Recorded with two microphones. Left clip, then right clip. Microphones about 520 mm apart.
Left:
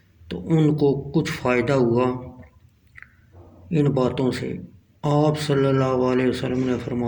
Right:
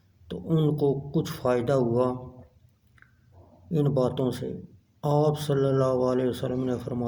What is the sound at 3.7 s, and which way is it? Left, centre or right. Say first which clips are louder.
Speech: left 4 dB; right.